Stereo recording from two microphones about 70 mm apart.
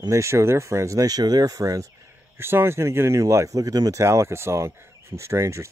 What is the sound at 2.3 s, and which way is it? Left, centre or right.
Speech, right.